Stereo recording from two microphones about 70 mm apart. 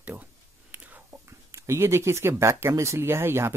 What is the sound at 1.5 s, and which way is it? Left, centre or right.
Speech, right.